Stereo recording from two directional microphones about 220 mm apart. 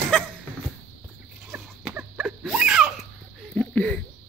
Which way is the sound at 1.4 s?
5° right (ahead or behind).